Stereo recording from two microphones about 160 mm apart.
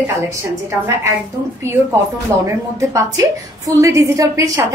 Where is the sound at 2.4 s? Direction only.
20° right (ahead or behind).